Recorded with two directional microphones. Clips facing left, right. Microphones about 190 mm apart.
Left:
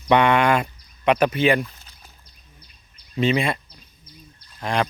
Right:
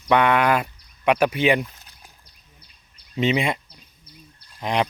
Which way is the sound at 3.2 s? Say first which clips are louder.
Left 1 dB; 15° right (ahead or behind).